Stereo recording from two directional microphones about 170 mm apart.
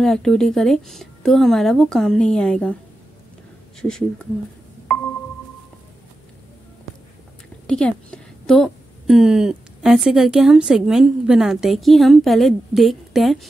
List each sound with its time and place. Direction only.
0.0 s a woman's voice: centre (ahead or behind)
3.8 s a woman's voice: 5° left (ahead or behind)
7.6 s a woman's voice: 5° left (ahead or behind)